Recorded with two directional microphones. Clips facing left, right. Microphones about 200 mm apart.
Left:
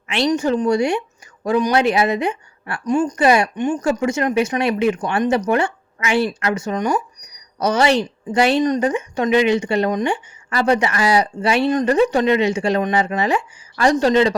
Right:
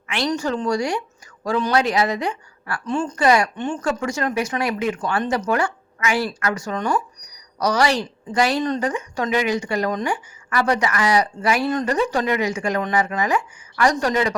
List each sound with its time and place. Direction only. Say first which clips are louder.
0.1 s a woman's voice: left 5 dB; 20° left (ahead or behind)